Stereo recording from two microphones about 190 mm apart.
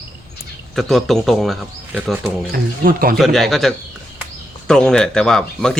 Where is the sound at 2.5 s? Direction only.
50° right (ahead or behind).